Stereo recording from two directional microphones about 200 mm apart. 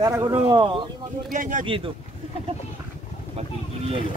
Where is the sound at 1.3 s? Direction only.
40° right (ahead or behind).